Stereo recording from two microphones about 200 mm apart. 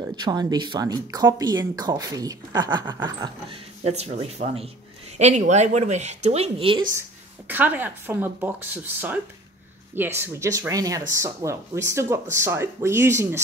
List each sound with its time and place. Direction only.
0.0 s speech: 20° right (ahead or behind)
3.2 s speech: 25° right (ahead or behind)
7.0 s speech: 10° right (ahead or behind)